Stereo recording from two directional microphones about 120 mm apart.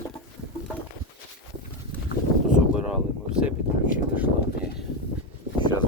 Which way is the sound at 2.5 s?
10° right (ahead or behind).